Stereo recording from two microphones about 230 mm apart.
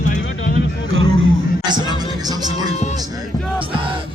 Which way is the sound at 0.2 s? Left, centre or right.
Left.